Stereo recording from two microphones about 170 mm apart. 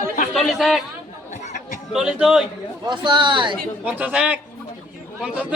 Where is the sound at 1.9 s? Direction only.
5° right (ahead or behind).